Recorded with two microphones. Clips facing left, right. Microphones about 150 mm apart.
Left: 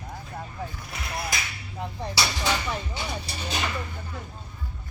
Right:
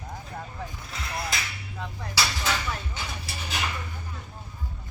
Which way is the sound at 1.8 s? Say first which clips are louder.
Left 2 dB; 20° left (ahead or behind).